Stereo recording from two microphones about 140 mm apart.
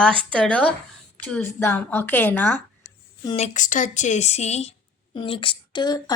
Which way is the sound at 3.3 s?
55° left (ahead or behind).